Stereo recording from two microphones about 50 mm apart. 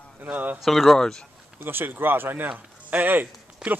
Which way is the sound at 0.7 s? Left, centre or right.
Centre.